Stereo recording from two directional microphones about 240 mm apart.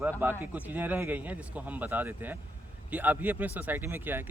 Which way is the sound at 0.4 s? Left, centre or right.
Centre.